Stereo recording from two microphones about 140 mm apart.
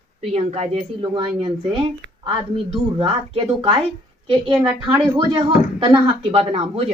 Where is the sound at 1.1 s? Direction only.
40° right (ahead or behind).